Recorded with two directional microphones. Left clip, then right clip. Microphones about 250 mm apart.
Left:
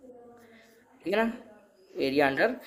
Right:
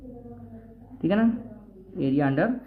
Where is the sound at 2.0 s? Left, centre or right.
Left.